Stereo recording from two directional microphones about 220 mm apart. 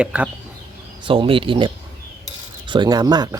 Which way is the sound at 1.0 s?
25° right (ahead or behind).